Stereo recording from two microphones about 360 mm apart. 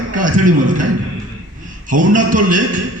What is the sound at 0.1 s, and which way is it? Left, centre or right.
Speech, right.